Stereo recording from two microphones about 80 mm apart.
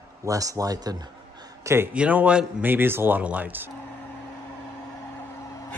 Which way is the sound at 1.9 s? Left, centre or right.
Centre.